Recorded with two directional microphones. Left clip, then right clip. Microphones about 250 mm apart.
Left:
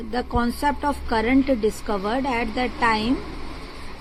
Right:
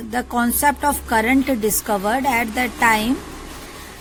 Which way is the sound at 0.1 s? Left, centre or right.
Right.